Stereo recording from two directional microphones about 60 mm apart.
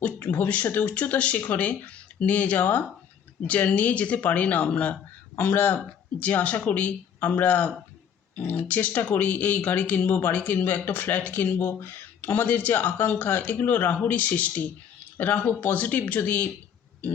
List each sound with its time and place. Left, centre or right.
0.0 s speech: left
5.4 s speech: left